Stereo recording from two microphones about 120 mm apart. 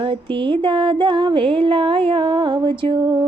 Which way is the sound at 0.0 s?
45° right (ahead or behind).